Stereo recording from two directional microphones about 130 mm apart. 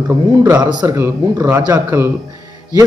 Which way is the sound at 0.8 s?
20° right (ahead or behind).